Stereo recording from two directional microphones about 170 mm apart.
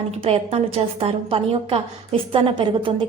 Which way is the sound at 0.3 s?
35° right (ahead or behind).